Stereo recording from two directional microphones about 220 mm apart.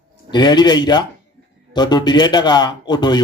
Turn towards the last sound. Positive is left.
turn(degrees=20)  # may be behind; listen again after turning